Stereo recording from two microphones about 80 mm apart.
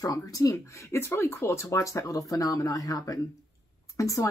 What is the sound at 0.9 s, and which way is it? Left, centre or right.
Speech, left.